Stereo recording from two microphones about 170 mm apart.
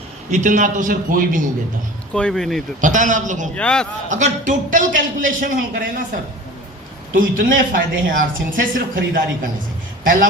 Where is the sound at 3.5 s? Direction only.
5° left (ahead or behind).